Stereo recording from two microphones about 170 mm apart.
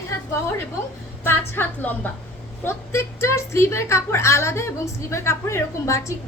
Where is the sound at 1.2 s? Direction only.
15° left (ahead or behind).